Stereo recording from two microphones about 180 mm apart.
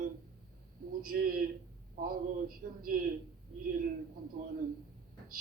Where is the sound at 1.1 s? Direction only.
55° right (ahead or behind).